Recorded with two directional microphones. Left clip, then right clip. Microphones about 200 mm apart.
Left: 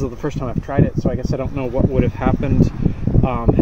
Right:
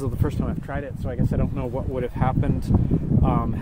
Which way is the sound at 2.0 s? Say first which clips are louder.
Left 5 dB; centre (ahead or behind).